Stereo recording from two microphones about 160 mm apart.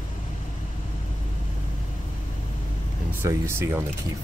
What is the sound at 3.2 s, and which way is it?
Speech, 15° right (ahead or behind).